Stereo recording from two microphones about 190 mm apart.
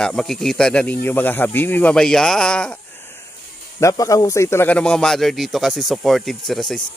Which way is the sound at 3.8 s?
15° left (ahead or behind).